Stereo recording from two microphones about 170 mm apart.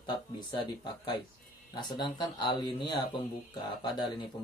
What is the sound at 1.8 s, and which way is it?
Speech, 25° left (ahead or behind).